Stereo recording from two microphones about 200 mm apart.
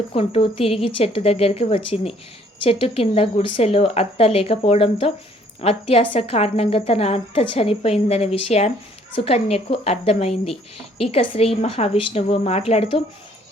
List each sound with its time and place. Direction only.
0.1 s a woman's voice: 25° left (ahead or behind)